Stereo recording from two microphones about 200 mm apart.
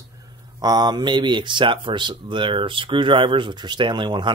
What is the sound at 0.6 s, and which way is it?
Speech, 20° right (ahead or behind).